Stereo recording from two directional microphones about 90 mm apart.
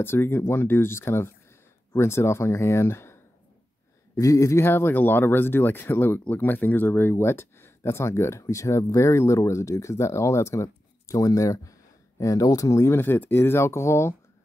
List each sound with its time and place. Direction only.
0.0 s speech: 25° left (ahead or behind)